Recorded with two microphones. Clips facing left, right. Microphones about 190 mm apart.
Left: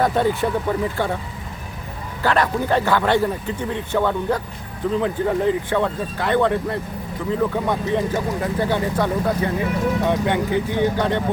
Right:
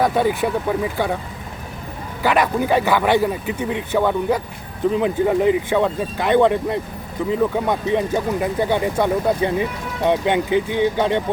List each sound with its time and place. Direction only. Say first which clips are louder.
0.0 s speech: right 1 dB; 10° right (ahead or behind)
2.2 s speech: right 2 dB; 15° right (ahead or behind)